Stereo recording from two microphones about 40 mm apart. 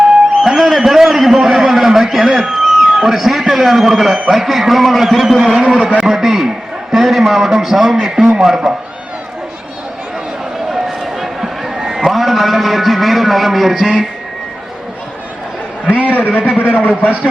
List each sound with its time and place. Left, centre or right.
0.4 s a man's voice: centre
5.6 s a man's voice: right
6.0 s a sound: centre
6.9 s a man's voice: centre
10.7 s a sound: centre
16.1 s a man's voice: left
16.9 s a man's voice: right